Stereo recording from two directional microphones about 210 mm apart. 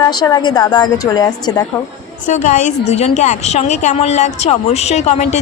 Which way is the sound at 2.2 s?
35° left (ahead or behind).